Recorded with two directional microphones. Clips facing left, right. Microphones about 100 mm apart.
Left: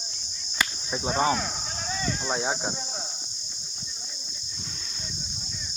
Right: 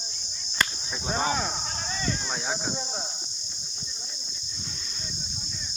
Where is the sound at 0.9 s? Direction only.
15° left (ahead or behind).